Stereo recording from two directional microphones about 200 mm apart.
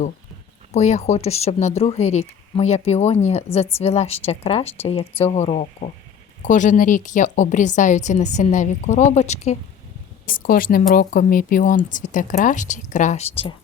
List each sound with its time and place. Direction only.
0.7 s speech: 35° left (ahead or behind)
10.2 s speech: 45° left (ahead or behind)